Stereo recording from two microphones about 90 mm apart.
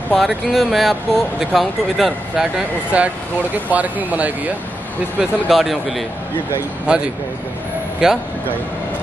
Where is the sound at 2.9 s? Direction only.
15° right (ahead or behind).